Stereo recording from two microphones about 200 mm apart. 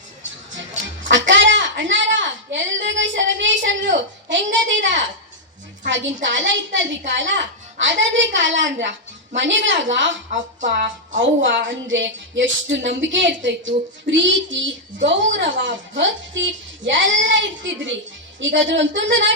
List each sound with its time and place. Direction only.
0.2 s music: 70° right (ahead or behind)
5.8 s a woman's voice: 65° right (ahead or behind)